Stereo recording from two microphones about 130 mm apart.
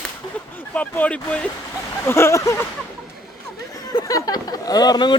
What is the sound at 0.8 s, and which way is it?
Speech, 10° left (ahead or behind).